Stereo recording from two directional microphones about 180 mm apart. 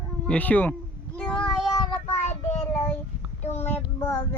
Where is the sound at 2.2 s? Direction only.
40° left (ahead or behind).